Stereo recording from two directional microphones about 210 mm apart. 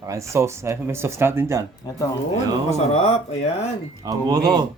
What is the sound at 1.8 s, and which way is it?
Speech, 20° left (ahead or behind).